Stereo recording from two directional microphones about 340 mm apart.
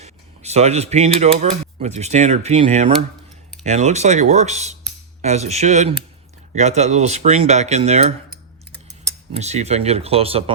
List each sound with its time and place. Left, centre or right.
0.0 s speech: centre
9.3 s speech: centre